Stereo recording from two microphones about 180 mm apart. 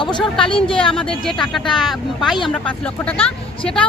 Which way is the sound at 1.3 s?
Centre (ahead or behind).